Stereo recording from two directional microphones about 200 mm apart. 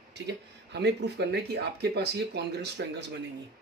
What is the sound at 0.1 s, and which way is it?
Speech, 60° right (ahead or behind).